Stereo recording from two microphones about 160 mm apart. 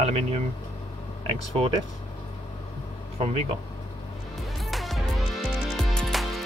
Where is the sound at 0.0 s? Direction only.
40° right (ahead or behind).